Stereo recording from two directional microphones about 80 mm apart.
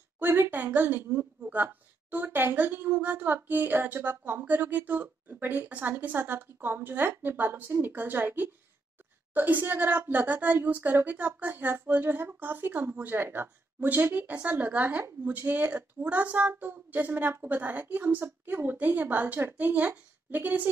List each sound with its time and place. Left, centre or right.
0.2 s a woman's voice: right